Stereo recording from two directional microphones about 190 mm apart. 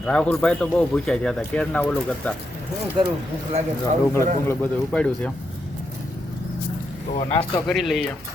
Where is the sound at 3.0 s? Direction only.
25° right (ahead or behind).